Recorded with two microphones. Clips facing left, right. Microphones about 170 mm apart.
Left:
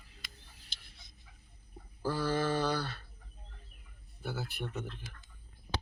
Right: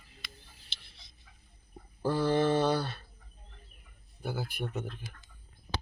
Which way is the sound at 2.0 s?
20° right (ahead or behind).